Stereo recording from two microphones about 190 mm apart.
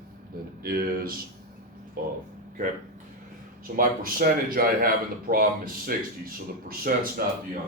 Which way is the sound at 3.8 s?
50° right (ahead or behind).